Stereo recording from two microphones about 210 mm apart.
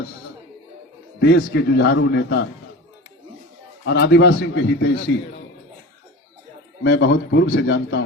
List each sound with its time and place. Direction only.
1.4 s a man's voice: 60° left (ahead or behind)
3.8 s a man's voice: 55° left (ahead or behind)
6.8 s a man's voice: 55° left (ahead or behind)